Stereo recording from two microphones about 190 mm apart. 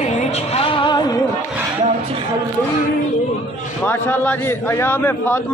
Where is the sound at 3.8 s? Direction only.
10° left (ahead or behind).